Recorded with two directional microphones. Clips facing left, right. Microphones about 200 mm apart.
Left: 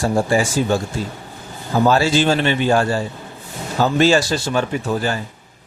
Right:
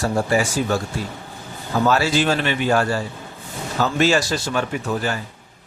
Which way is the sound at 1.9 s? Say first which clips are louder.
Left 3 dB; 25° left (ahead or behind).